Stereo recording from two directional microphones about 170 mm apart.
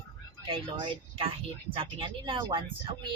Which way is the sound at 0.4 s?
30° right (ahead or behind).